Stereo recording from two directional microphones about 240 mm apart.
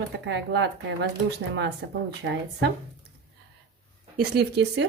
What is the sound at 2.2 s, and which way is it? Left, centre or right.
Speech, right.